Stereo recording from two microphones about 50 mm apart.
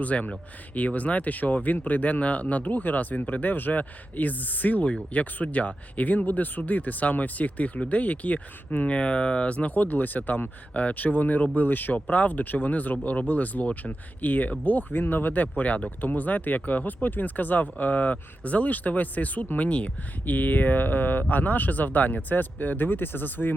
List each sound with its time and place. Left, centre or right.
0.0 s speech: left
9.0 s speech: left